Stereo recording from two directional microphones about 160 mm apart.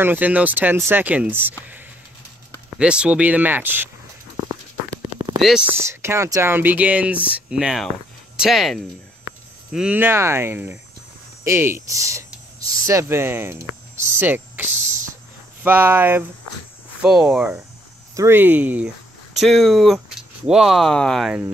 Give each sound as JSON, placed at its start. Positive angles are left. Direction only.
{"t": 0.0, "sound": "speech", "side_deg": -10}
{"t": 2.7, "sound": "speech", "side_deg": -5}
{"t": 5.0, "sound": "a sound", "side_deg": -25}
{"t": 5.4, "sound": "speech", "side_deg": -5}
{"t": 17.0, "sound": "speech", "side_deg": 0}
{"t": 18.1, "sound": "speech", "side_deg": -15}
{"t": 19.4, "sound": "speech", "side_deg": 0}